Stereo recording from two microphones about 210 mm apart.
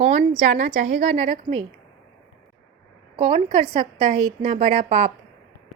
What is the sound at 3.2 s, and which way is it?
A woman's voice, 25° right (ahead or behind).